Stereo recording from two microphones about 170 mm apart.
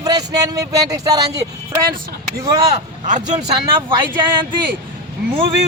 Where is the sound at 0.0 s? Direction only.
20° right (ahead or behind).